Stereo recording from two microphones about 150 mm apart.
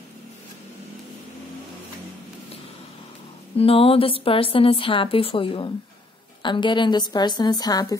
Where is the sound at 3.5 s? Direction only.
40° left (ahead or behind).